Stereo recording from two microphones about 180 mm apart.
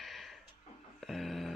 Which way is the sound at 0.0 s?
Centre (ahead or behind).